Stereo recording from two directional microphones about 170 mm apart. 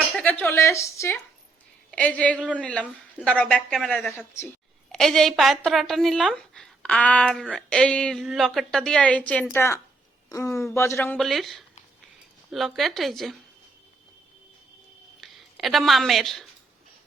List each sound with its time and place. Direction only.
0.1 s a sound: 10° left (ahead or behind)
1.9 s a woman's voice: 5° left (ahead or behind)
11.2 s a woman's voice: centre (ahead or behind)
15.2 s speech: centre (ahead or behind)